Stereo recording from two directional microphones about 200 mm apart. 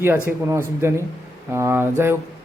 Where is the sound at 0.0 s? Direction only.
10° right (ahead or behind).